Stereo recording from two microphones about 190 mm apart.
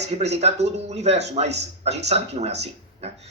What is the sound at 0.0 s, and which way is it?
Speech, 35° right (ahead or behind).